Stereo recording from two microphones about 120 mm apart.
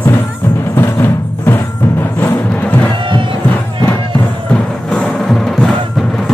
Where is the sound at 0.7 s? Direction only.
20° left (ahead or behind).